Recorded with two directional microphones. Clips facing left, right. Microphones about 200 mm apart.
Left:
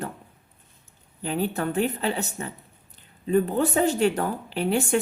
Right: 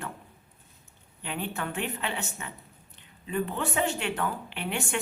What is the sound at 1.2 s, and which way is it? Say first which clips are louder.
Speech: left 8 dB; 40° left (ahead or behind).